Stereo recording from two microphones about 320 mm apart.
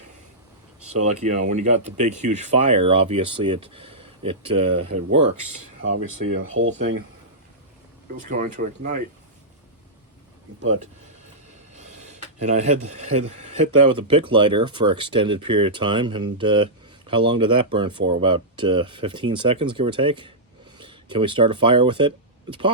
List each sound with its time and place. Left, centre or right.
1.0 s speech: right
5.8 s speech: right
6.7 s speech: right
8.2 s speech: right
11.7 s a sound: right
13.8 s speech: centre